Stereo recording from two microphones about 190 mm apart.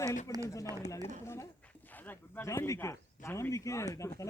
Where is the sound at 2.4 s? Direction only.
15° left (ahead or behind).